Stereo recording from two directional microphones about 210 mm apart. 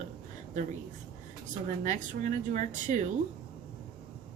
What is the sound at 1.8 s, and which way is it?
Speech, 35° right (ahead or behind).